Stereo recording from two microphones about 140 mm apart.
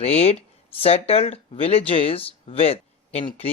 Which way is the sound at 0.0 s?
45° left (ahead or behind).